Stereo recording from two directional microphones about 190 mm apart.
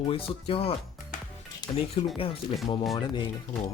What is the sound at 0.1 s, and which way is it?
Speech, 30° left (ahead or behind).